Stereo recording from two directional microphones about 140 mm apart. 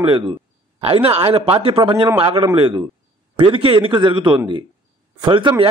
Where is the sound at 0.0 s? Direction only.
35° right (ahead or behind).